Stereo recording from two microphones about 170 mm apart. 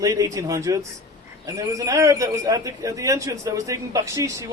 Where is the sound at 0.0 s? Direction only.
20° right (ahead or behind).